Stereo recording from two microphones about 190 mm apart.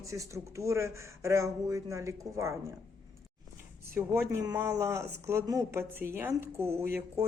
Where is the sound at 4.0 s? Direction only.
15° right (ahead or behind).